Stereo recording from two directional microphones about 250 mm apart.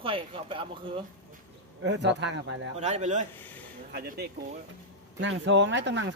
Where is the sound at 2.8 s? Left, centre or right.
Right.